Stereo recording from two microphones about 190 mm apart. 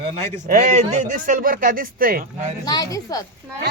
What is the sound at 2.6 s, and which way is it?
Speech, 20° left (ahead or behind).